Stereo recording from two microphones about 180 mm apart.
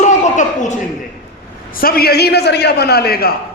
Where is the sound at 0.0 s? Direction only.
40° left (ahead or behind).